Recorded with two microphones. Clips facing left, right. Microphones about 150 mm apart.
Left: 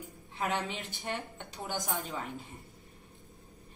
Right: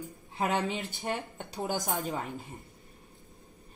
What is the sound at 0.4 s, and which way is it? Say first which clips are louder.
Speech: right 4 dB; 45° right (ahead or behind).